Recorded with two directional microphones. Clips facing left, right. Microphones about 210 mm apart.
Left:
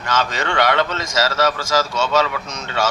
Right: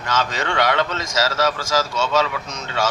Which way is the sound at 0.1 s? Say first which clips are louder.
Left 1 dB; 70° left (ahead or behind).